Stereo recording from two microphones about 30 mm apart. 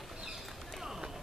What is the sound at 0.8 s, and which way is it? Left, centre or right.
Run, centre.